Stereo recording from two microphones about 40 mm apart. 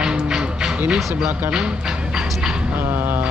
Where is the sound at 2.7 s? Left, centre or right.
Right.